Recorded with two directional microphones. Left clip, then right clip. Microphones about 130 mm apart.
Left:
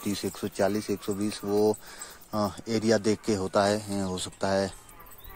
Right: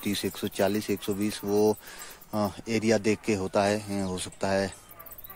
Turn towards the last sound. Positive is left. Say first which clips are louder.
# even
turn(degrees=-10)  # may be behind; listen again after turning